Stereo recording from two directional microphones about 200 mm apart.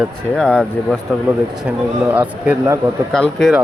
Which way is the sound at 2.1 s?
5° right (ahead or behind).